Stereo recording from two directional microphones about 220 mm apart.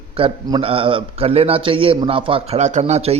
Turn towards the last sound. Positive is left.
turn(degrees=-30)  # may be behind; listen again after turning